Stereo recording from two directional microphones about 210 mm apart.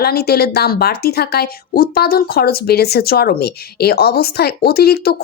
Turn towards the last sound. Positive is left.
turn(degrees=50)  # may be behind; listen again after turning